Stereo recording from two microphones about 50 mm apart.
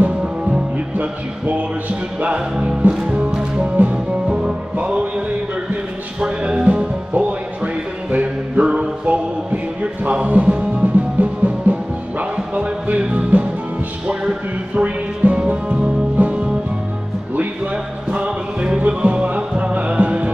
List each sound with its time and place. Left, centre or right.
0.0 s music: centre
0.9 s music: right
3.7 s music: right
4.3 s music: centre
4.7 s music: right
6.2 s music: right
14.8 s music: right
18.1 s music: right